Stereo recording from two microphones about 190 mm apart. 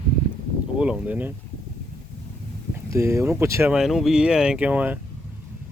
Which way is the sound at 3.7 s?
Centre (ahead or behind).